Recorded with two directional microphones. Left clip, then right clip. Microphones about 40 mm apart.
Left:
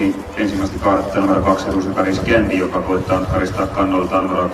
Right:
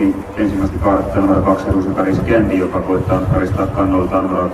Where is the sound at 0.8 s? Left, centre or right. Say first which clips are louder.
Right 1 dB; left.